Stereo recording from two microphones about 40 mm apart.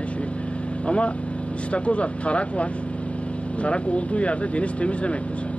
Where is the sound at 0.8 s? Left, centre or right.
Left.